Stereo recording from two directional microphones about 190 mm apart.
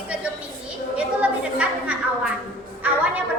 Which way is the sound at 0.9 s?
5° right (ahead or behind).